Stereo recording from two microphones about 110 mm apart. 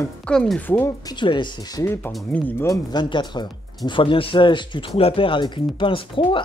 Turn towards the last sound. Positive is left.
turn(degrees=50)  # may be behind; listen again after turning